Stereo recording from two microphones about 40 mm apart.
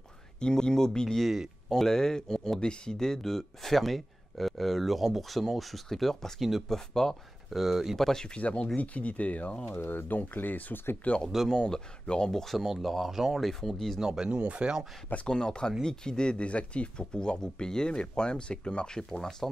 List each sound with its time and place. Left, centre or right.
0.4 s speech: centre
7.5 s speech: centre
8.0 s speech: centre
8.4 s speech: left
9.8 s speech: left
11.3 s speech: centre
11.7 s speech: left
12.3 s speech: centre
13.9 s speech: centre
14.4 s speech: right
15.2 s speech: centre
18.9 s speech: centre